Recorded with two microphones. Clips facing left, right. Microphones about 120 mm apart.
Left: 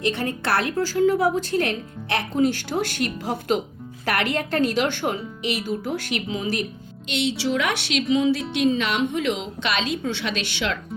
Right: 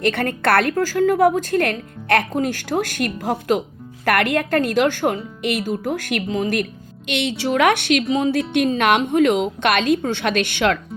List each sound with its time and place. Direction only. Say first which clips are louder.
0.0 s a woman's voice: right 5 dB; 55° right (ahead or behind)